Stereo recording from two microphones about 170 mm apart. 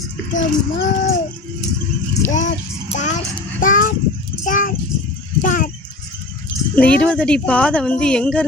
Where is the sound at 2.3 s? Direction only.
45° left (ahead or behind).